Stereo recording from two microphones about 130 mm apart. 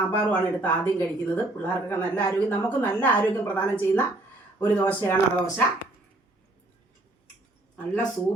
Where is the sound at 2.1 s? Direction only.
10° left (ahead or behind).